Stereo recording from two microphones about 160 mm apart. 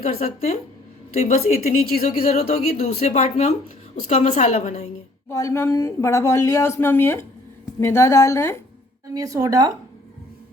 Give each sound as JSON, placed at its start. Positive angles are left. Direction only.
{"t": 0.0, "sound": "a woman's voice", "side_deg": 40}
{"t": 1.9, "sound": "speech", "side_deg": 55}
{"t": 2.2, "sound": "a woman's voice", "side_deg": 40}
{"t": 5.3, "sound": "speech", "side_deg": 20}
{"t": 9.1, "sound": "speech", "side_deg": -20}